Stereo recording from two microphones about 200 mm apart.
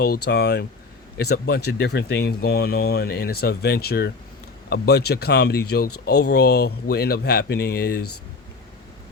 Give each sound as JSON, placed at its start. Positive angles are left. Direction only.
{"t": 0.0, "sound": "speech", "side_deg": 55}